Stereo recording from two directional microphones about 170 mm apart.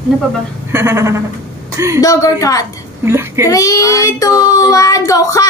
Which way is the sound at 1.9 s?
20° left (ahead or behind).